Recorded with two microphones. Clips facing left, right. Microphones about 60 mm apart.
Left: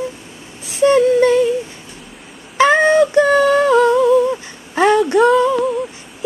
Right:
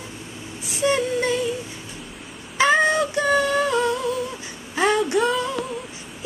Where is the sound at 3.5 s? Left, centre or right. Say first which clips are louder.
Left 9 dB; left.